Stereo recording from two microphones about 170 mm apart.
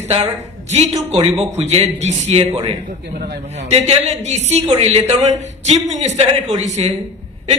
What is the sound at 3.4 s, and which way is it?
Speech, 40° right (ahead or behind).